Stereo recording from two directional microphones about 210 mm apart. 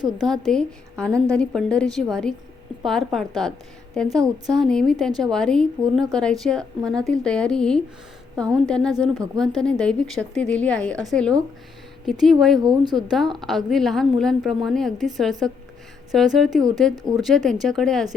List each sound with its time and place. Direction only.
0.3 s a woman's voice: centre (ahead or behind)
12.5 s speech: 20° right (ahead or behind)
13.0 s a woman's voice: centre (ahead or behind)
16.9 s speech: 20° right (ahead or behind)
17.2 s a woman's voice: centre (ahead or behind)